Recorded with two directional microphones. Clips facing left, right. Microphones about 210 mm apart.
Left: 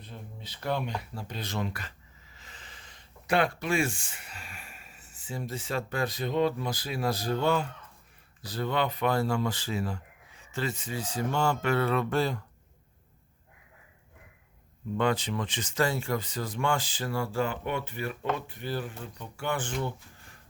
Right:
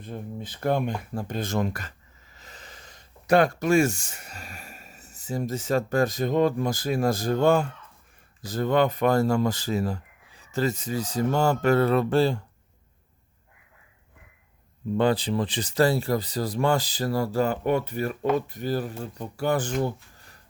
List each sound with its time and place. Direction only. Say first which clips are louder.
0.0 s speech: right 10 dB; 50° right (ahead or behind); by 12.5 s 30° right (ahead or behind)
14.9 s speech: right 5 dB; 35° right (ahead or behind)